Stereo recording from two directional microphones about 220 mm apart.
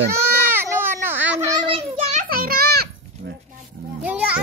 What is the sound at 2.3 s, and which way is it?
Goat, 40° right (ahead or behind).